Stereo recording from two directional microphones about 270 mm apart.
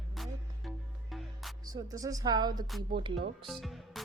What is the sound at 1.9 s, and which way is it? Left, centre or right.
Speech, centre.